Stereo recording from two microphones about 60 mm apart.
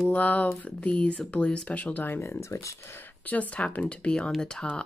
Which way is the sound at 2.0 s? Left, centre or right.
Left.